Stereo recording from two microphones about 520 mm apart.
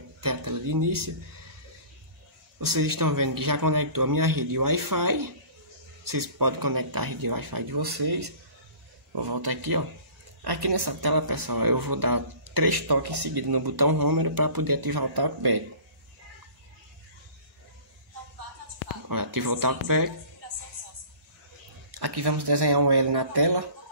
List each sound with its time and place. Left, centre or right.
0.2 s a sound: right
2.6 s speech: right
19.0 s speech: right
21.9 s speech: right